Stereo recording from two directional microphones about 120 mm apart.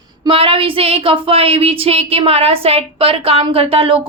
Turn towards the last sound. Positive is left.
turn(degrees=-55)  # may be behind; listen again after turning